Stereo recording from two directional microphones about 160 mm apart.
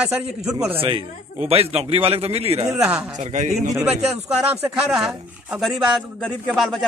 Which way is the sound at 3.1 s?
50° right (ahead or behind).